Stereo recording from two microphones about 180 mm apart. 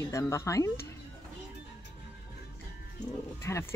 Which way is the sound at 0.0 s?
15° left (ahead or behind).